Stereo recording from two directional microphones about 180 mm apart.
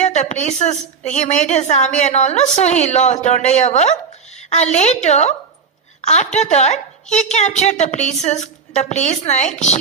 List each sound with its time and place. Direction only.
0.0 s a woman's voice: 40° left (ahead or behind)